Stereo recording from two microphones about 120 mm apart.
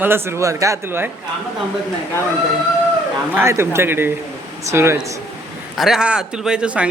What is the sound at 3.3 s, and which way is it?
Speech, 20° right (ahead or behind).